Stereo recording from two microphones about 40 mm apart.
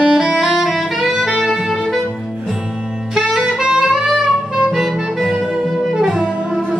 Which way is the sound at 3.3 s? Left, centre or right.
Centre.